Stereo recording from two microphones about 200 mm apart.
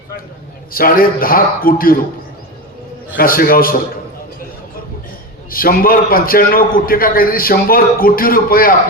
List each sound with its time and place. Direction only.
0.7 s a man's voice: 45° left (ahead or behind)
3.2 s a man's voice: 45° left (ahead or behind)
5.5 s a man's voice: 45° left (ahead or behind)